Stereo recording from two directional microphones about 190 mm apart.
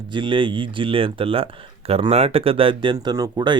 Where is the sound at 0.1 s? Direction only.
25° right (ahead or behind).